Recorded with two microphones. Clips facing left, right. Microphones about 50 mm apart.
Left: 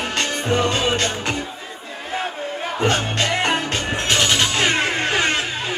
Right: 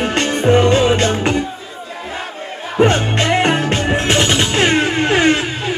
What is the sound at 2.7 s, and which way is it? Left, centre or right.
Music, right.